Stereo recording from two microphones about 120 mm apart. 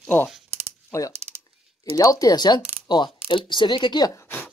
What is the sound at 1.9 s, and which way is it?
Speech, 30° left (ahead or behind).